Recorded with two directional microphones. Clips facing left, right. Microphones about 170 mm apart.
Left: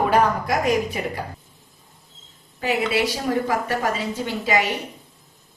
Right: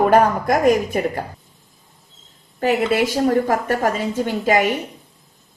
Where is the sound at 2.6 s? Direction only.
50° right (ahead or behind).